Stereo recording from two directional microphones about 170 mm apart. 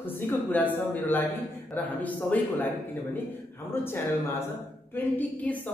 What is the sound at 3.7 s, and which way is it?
A woman's voice, 15° left (ahead or behind).